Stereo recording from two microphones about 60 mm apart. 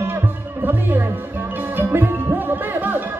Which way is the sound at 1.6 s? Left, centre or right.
Right.